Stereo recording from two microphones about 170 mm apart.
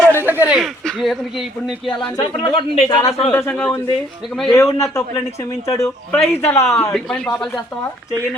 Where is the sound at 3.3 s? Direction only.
10° left (ahead or behind).